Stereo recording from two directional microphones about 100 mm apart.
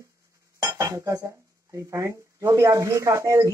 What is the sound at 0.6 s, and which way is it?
Speech, 30° right (ahead or behind).